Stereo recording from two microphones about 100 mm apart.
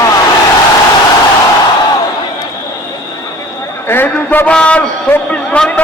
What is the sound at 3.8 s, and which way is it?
A man's voice, 20° left (ahead or behind).